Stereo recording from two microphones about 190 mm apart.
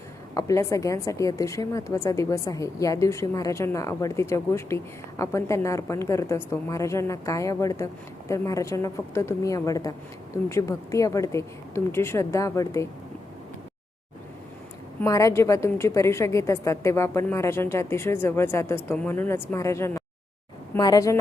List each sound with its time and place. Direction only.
0.3 s a woman's voice: 15° left (ahead or behind)
15.0 s a woman's voice: 15° left (ahead or behind)